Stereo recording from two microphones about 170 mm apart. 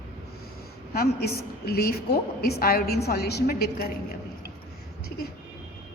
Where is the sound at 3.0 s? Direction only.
70° left (ahead or behind).